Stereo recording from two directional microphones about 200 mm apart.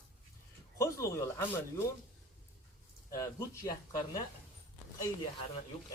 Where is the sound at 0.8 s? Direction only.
15° left (ahead or behind).